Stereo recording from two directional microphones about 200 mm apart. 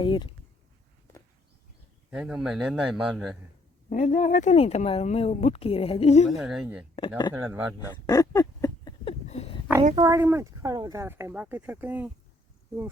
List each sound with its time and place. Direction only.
0.0 s speech: 25° left (ahead or behind)
2.0 s a man's voice: 5° right (ahead or behind)
3.8 s speech: 35° left (ahead or behind)
6.3 s a man's voice: centre (ahead or behind)
7.8 s a sound: 20° left (ahead or behind)
9.2 s a sound: 30° left (ahead or behind)
9.9 s speech: 15° right (ahead or behind)